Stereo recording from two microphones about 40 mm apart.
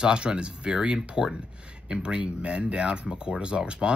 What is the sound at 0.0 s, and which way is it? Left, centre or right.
Speech, right.